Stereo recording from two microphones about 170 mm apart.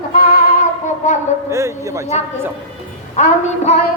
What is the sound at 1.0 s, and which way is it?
Speech, 45° left (ahead or behind).